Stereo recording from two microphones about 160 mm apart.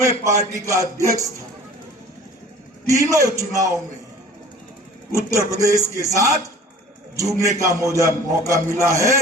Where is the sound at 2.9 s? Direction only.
20° right (ahead or behind).